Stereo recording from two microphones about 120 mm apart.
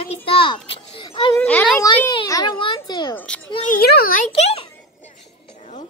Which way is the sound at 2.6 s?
40° left (ahead or behind).